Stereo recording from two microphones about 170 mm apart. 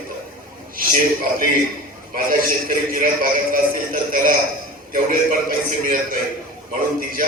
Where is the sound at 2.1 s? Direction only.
55° right (ahead or behind).